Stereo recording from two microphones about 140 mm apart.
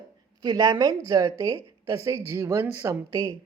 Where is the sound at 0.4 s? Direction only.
30° right (ahead or behind).